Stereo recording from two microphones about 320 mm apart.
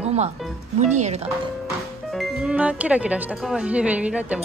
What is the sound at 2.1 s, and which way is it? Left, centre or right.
Speech, centre.